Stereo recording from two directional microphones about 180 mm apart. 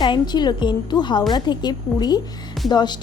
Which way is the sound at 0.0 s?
25° left (ahead or behind).